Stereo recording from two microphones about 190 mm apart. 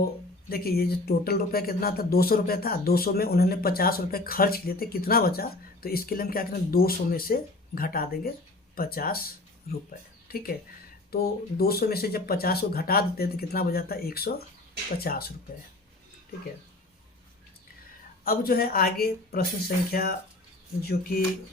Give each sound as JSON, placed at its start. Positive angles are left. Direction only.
{"t": 0.5, "sound": "speech", "side_deg": 55}
{"t": 10.2, "sound": "speech", "side_deg": 50}
{"t": 18.3, "sound": "speech", "side_deg": 50}